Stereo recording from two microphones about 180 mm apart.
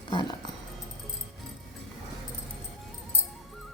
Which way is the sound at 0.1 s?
25° left (ahead or behind).